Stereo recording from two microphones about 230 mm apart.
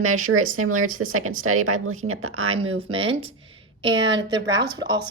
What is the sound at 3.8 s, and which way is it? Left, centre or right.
Speech, right.